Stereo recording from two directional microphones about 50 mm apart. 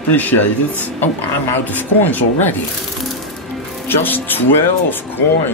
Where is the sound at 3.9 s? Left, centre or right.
Left.